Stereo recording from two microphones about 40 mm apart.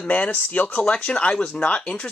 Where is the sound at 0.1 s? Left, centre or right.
Left.